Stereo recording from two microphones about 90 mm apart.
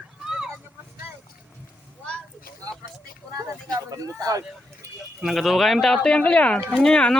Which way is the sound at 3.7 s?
40° right (ahead or behind).